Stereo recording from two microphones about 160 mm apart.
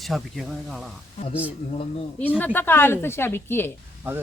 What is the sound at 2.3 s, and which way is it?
A woman's voice, 10° left (ahead or behind).